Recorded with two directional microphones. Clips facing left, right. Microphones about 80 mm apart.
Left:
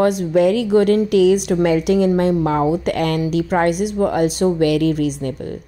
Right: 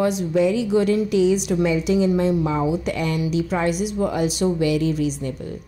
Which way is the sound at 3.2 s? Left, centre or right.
Left.